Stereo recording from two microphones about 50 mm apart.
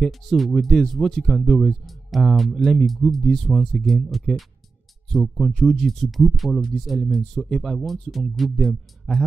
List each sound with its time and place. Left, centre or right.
0.0 s speech: centre